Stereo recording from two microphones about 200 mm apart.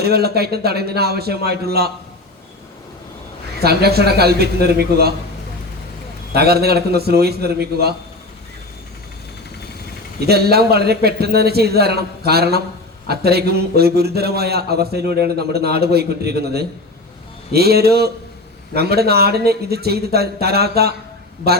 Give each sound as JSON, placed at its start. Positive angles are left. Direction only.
{"t": 0.0, "sound": "speech", "side_deg": -50}
{"t": 3.6, "sound": "speech", "side_deg": -55}
{"t": 6.3, "sound": "speech", "side_deg": -50}
{"t": 10.2, "sound": "speech", "side_deg": -50}